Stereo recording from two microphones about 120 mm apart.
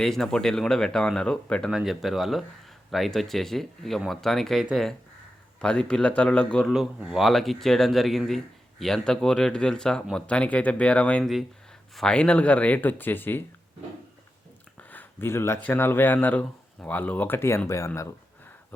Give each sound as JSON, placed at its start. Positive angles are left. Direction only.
{"t": 0.0, "sound": "speech", "side_deg": 5}
{"t": 14.8, "sound": "speech", "side_deg": 15}